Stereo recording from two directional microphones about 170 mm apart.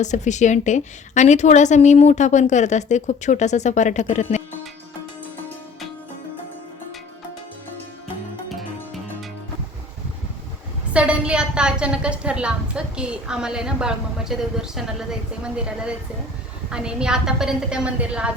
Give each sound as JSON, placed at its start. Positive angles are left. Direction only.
{"t": 0.0, "sound": "a woman's voice", "side_deg": 45}
{"t": 8.4, "sound": "music", "side_deg": 0}
{"t": 10.9, "sound": "a woman's voice", "side_deg": -5}